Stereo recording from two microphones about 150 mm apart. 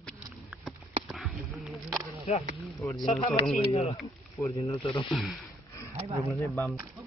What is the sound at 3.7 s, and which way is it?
Speech, 45° left (ahead or behind).